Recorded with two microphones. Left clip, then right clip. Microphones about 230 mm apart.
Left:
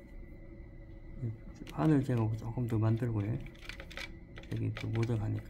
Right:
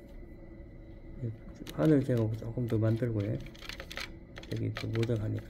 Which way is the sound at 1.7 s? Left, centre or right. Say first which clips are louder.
Right 4 dB; centre.